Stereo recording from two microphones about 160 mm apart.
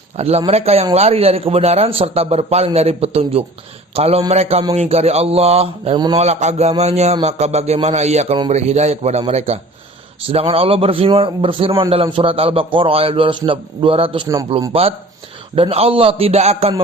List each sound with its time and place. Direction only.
0.2 s a man's voice: 40° right (ahead or behind)